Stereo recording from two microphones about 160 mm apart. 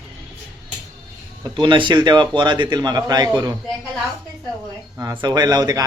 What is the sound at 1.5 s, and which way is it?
A man's voice, 30° right (ahead or behind).